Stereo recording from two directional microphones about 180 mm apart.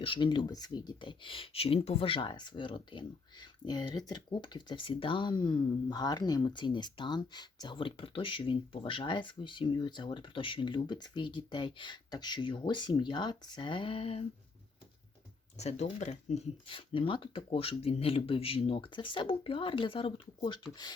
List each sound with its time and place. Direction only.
0.0 s speech: 25° left (ahead or behind)
15.5 s speech: 40° left (ahead or behind)